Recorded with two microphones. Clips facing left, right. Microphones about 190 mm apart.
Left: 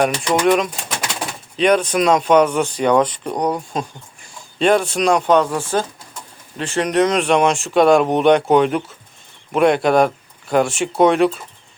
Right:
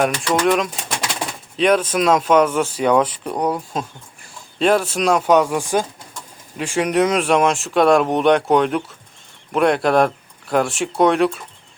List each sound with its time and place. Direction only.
0.3 s speech: 15° left (ahead or behind)
1.5 s speech: centre (ahead or behind)